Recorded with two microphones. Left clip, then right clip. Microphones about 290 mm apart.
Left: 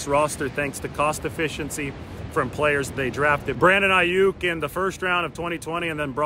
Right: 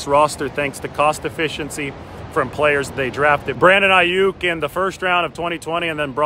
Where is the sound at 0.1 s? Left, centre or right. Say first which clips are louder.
Right 6 dB; centre.